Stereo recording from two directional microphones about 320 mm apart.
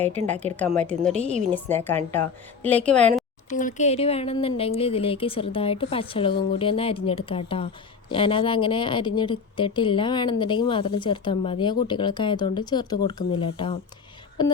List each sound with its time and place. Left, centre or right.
0.5 s a woman's voice: centre
3.5 s a woman's voice: left